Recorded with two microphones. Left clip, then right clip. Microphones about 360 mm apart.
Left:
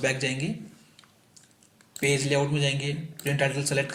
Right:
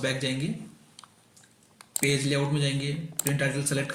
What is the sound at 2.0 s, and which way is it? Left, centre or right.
Speech, centre.